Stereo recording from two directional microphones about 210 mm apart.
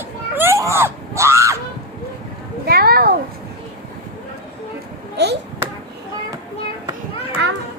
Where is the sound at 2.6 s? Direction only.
45° right (ahead or behind).